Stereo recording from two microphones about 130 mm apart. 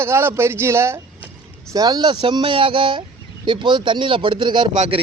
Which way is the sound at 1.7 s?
30° right (ahead or behind).